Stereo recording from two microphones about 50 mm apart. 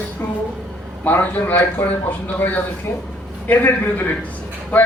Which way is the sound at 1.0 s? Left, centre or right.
Left.